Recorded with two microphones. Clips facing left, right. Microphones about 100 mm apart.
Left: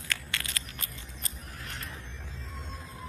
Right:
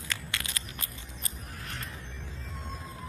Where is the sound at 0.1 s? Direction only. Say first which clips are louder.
Left 1 dB; 20° right (ahead or behind).